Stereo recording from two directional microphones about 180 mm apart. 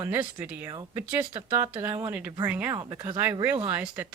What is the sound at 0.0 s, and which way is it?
Speech, 10° right (ahead or behind).